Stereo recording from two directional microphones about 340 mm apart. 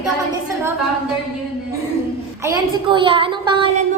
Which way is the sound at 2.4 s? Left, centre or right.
Centre.